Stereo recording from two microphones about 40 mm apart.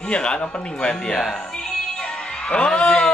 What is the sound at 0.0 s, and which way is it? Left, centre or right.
Speech, left.